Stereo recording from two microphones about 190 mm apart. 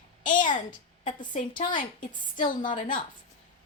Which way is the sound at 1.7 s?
45° left (ahead or behind).